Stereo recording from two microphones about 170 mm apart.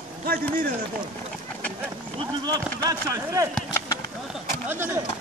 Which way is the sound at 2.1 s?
25° right (ahead or behind).